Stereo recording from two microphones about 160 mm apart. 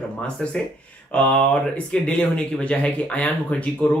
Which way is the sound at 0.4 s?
5° left (ahead or behind).